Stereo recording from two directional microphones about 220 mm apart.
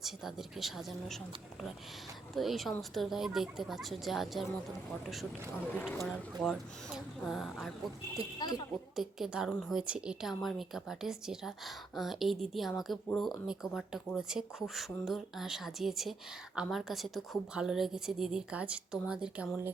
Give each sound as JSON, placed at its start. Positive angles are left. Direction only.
{"t": 0.0, "sound": "a woman's voice", "side_deg": 0}
{"t": 2.3, "sound": "a woman's voice", "side_deg": 0}
{"t": 5.7, "sound": "a woman's voice", "side_deg": 5}
{"t": 8.4, "sound": "speech", "side_deg": 15}
{"t": 9.0, "sound": "a woman's voice", "side_deg": 0}